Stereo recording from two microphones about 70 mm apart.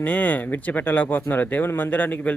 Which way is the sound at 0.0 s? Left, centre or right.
Left.